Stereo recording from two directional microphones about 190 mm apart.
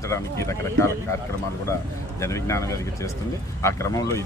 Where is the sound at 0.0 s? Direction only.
15° left (ahead or behind).